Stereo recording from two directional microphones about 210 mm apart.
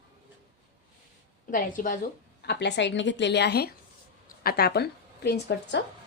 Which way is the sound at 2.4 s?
55° left (ahead or behind).